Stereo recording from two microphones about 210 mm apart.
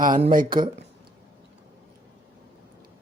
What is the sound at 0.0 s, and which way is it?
Speech, 40° right (ahead or behind).